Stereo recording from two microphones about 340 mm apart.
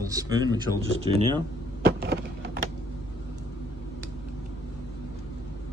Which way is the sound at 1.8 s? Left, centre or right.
Right.